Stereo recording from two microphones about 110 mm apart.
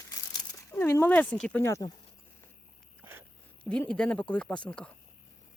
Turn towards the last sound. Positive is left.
turn(degrees=10)  # may be behind; listen again after turning